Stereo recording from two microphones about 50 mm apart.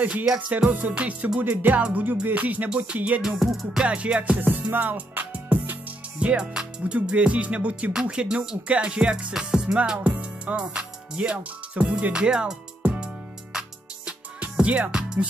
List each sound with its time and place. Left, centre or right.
0.0 s music: centre
0.7 s music: right
3.2 s music: centre
3.8 s music: right
4.4 s music: right
6.1 s music: right
7.9 s music: centre
12.1 s music: centre